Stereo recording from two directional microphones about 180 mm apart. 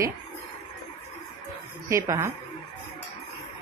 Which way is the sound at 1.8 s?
15° right (ahead or behind).